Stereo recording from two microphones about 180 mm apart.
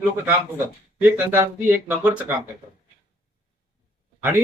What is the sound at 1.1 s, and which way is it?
Speech, 15° right (ahead or behind).